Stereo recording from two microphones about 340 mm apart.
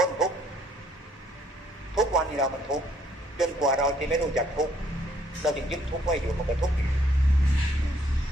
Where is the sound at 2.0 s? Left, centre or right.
Centre.